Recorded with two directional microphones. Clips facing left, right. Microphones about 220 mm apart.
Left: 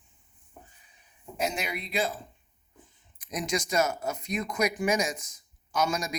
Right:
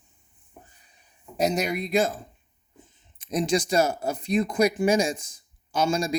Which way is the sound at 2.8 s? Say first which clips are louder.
Right 2 dB; 20° right (ahead or behind).